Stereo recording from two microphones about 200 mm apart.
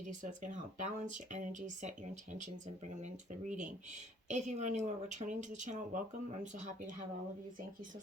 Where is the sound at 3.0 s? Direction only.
40° right (ahead or behind).